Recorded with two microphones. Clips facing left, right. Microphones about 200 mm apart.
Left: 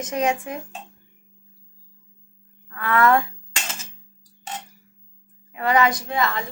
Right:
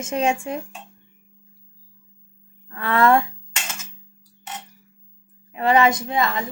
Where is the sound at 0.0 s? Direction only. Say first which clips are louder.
Right 1 dB; 25° right (ahead or behind).